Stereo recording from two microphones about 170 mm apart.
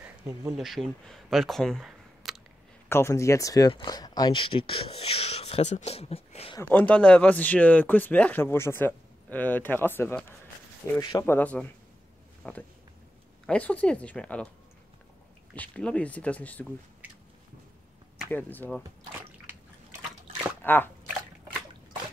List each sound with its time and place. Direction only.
0.6 s speech: centre (ahead or behind)
2.9 s speech: 15° left (ahead or behind); by 6.5 s 35° left (ahead or behind)
6.6 s speech: 10° left (ahead or behind)
15.5 s speech: 10° left (ahead or behind)
18.3 s speech: 10° left (ahead or behind)
20.6 s speech: 10° left (ahead or behind)